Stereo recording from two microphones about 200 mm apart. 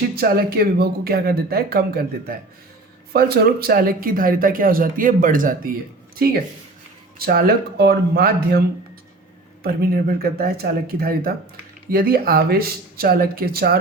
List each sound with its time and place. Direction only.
0.2 s speech: 50° right (ahead or behind)
7.2 s speech: 50° right (ahead or behind)
9.6 s speech: 50° right (ahead or behind)